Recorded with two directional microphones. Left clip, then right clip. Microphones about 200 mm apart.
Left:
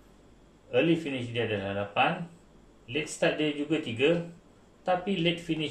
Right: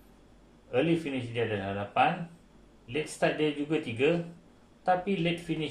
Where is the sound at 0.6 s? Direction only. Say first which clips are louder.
Left 2 dB; 15° right (ahead or behind).